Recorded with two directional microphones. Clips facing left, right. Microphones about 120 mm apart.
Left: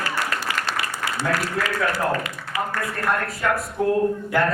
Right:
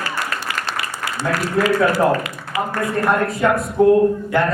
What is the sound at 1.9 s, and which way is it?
Speech, 15° right (ahead or behind).